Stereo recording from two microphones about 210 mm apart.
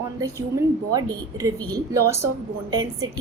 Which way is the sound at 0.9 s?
15° right (ahead or behind).